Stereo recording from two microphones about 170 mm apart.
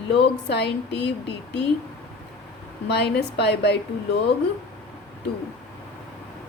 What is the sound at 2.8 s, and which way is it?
Speech, 75° left (ahead or behind).